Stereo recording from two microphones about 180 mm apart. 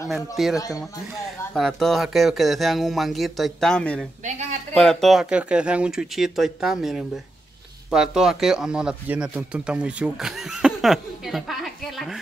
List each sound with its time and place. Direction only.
0.4 s speech: centre (ahead or behind)
4.2 s speech: 40° right (ahead or behind)
4.7 s speech: centre (ahead or behind)